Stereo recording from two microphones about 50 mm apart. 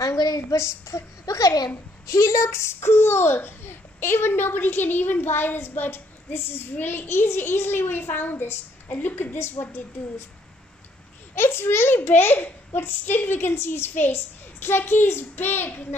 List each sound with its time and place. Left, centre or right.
0.1 s a woman's voice: left
2.1 s a child's voice: left
11.3 s a child's voice: left